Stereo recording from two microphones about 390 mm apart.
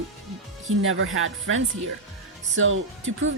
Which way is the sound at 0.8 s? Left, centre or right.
Right.